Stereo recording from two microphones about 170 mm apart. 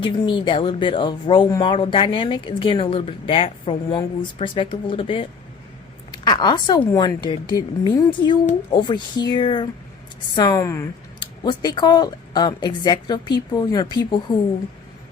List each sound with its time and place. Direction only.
0.0 s speech: 30° left (ahead or behind)